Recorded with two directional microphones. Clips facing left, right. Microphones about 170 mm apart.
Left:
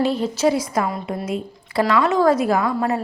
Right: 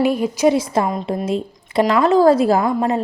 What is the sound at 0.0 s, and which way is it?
Speech, 15° right (ahead or behind).